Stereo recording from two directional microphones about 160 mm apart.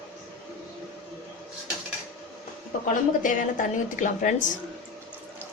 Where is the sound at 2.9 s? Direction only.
55° left (ahead or behind).